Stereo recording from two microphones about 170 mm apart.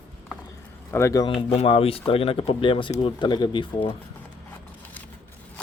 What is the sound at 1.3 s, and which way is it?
Speech, 35° left (ahead or behind).